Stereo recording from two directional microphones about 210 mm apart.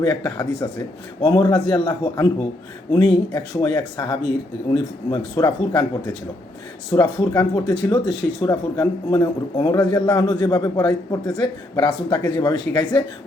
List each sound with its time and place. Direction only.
0.3 s speech: 20° left (ahead or behind)
6.9 s speech: 20° left (ahead or behind)